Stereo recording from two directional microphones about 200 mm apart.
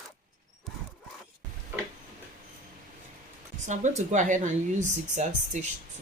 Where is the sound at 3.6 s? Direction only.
35° right (ahead or behind).